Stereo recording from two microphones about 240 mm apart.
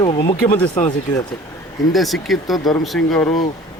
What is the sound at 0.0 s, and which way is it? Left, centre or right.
Speech, left.